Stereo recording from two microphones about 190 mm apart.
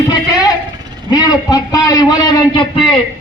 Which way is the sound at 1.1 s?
20° left (ahead or behind).